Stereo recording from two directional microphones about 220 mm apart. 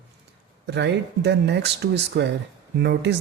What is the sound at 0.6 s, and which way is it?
Speech, 50° right (ahead or behind).